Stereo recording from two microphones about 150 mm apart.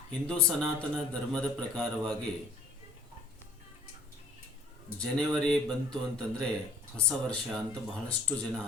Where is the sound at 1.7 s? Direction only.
5° left (ahead or behind).